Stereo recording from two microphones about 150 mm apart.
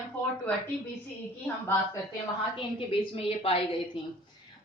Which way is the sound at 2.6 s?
35° left (ahead or behind).